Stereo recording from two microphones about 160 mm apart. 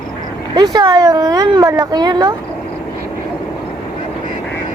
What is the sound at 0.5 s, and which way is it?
Speech, 25° right (ahead or behind).